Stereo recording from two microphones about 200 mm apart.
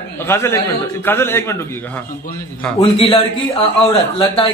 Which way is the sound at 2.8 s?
30° left (ahead or behind).